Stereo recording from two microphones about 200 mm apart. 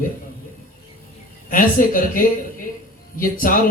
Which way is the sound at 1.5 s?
45° left (ahead or behind).